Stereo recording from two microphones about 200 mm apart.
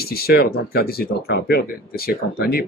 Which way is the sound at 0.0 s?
50° left (ahead or behind).